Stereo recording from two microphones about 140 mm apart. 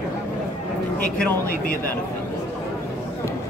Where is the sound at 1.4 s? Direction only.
90° left.